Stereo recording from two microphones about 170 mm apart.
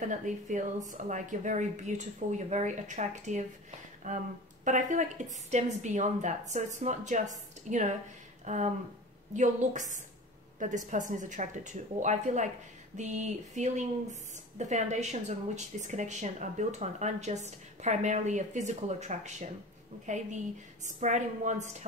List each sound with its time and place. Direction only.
0.0 s a woman's voice: 45° right (ahead or behind)